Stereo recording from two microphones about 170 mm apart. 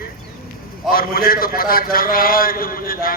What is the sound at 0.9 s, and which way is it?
A man's voice, 60° left (ahead or behind).